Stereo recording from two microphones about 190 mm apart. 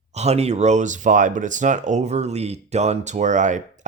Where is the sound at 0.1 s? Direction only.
35° right (ahead or behind).